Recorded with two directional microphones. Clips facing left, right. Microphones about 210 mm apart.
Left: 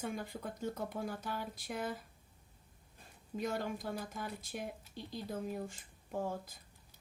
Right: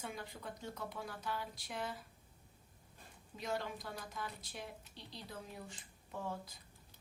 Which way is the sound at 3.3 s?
50° left (ahead or behind).